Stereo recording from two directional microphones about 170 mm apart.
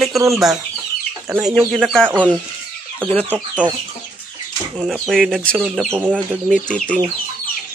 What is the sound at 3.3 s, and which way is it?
Speech, 10° right (ahead or behind).